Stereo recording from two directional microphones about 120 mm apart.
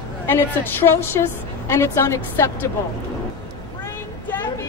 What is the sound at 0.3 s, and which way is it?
Speech, 20° left (ahead or behind).